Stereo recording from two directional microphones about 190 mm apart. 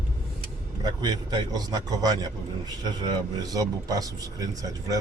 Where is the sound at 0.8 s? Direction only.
20° right (ahead or behind).